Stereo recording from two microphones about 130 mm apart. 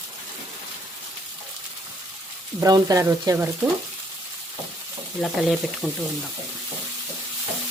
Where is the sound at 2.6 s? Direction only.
30° right (ahead or behind).